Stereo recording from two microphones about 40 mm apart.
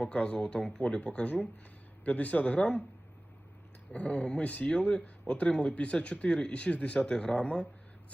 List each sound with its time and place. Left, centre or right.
0.0 s speech: left
0.8 s speech: left
3.9 s speech: left
7.0 s speech: left